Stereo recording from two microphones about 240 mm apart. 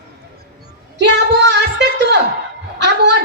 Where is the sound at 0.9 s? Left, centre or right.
Right.